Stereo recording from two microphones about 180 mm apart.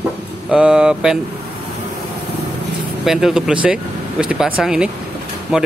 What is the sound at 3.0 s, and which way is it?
Speech, 5° right (ahead or behind).